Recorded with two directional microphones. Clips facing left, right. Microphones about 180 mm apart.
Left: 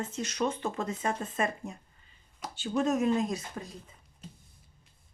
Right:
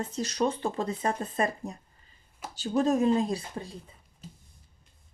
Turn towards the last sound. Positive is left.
turn(degrees=-30)  # may be behind; listen again after turning